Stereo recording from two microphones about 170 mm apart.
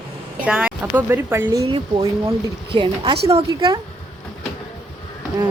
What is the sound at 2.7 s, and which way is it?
Speech, 30° right (ahead or behind).